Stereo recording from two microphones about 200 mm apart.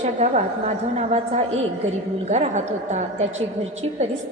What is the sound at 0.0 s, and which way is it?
A woman's voice, 35° right (ahead or behind).